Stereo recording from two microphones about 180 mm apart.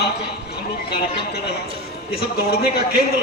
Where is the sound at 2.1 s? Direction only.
60° left (ahead or behind).